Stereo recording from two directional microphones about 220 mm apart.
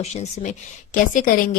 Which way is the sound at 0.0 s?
30° left (ahead or behind).